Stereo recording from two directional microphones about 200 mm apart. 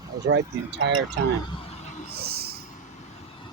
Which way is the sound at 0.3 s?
60° right (ahead or behind).